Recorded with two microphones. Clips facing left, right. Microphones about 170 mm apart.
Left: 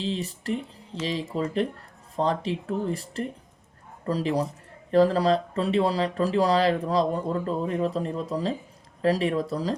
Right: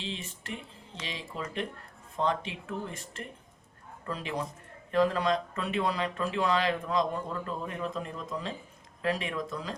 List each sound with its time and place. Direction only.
0.0 s speech: 35° left (ahead or behind)